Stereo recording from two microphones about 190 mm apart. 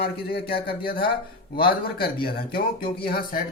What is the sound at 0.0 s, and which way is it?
Speech, 55° left (ahead or behind).